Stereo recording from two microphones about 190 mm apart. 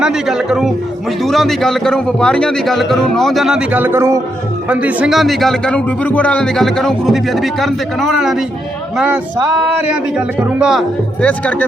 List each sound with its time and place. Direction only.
0.0 s a man's voice: centre (ahead or behind)